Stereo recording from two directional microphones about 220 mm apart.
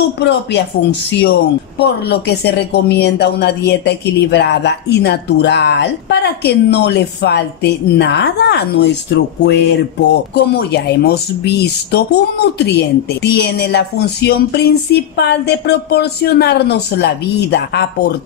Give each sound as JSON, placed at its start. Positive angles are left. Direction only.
{"t": 0.2, "sound": "a woman's voice", "side_deg": 50}